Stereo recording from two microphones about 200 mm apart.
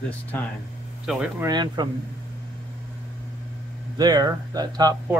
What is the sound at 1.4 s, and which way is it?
Speech, 20° right (ahead or behind).